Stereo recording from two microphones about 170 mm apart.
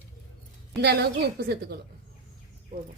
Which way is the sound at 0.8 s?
70° right (ahead or behind).